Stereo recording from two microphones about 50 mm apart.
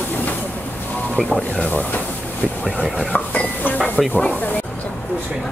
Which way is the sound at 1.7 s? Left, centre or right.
Left.